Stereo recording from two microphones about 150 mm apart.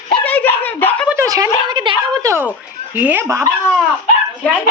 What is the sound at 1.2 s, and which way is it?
A woman's voice, 20° right (ahead or behind).